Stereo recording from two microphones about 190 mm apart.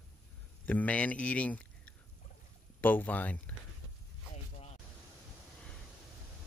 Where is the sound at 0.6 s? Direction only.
10° left (ahead or behind).